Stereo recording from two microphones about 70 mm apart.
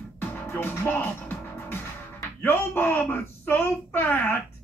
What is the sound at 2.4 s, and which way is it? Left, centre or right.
Speech, left.